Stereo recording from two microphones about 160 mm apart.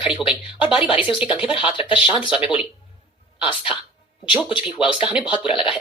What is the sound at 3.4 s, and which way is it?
Speech, 30° left (ahead or behind).